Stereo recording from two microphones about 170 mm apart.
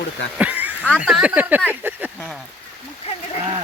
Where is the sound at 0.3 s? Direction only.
10° right (ahead or behind).